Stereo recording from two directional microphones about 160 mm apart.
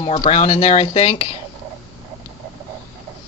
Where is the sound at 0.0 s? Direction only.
40° left (ahead or behind).